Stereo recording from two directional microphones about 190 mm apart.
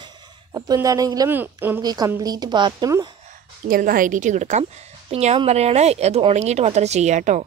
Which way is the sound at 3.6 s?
50° right (ahead or behind).